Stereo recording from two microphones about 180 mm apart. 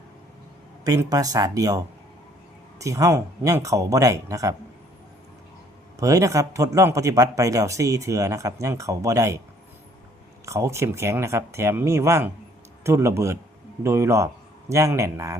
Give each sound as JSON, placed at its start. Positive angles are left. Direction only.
{"t": 0.9, "sound": "speech", "side_deg": -20}
{"t": 6.0, "sound": "speech", "side_deg": -20}
{"t": 10.4, "sound": "speech", "side_deg": -15}